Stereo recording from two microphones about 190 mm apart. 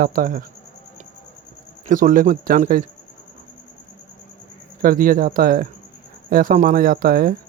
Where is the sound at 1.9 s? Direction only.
45° right (ahead or behind).